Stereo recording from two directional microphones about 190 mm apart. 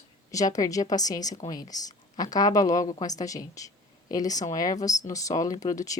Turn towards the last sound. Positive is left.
turn(degrees=20)  # may be behind; listen again after turning